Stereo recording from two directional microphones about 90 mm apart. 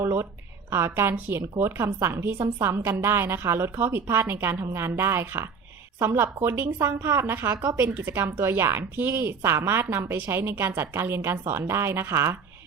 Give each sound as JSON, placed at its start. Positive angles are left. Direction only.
{"t": 0.0, "sound": "a woman's voice", "side_deg": -30}
{"t": 7.6, "sound": "speech", "side_deg": -35}
{"t": 7.9, "sound": "a woman's voice", "side_deg": -25}